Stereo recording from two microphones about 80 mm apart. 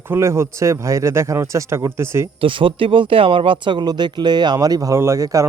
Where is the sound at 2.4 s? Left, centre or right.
Right.